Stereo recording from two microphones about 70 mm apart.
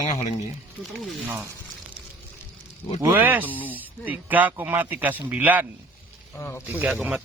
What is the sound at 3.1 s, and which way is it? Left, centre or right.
Speech, right.